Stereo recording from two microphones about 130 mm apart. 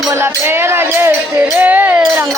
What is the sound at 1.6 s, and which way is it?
Speech, 15° right (ahead or behind).